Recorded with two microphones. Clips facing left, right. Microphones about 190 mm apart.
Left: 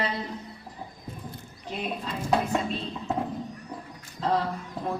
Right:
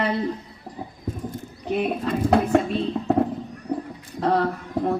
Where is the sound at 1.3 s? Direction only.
55° right (ahead or behind).